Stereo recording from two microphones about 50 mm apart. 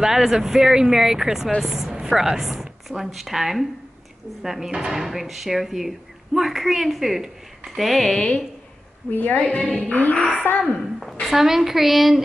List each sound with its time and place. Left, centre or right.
0.0 s a woman's voice: centre
8.1 s a woman's voice: left
9.1 s music: left
10.4 s a woman's voice: left
10.8 s speech: centre